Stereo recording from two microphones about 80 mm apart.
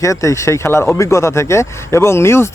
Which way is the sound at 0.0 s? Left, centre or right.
Left.